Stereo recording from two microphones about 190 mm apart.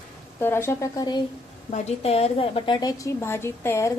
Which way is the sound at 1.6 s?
35° left (ahead or behind).